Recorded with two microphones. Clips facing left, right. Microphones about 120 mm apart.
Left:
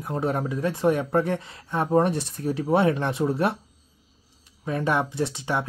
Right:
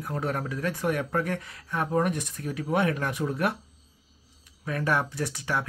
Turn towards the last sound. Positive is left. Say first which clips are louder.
# left 4 dB
turn(degrees=25)  # may be behind; listen again after turning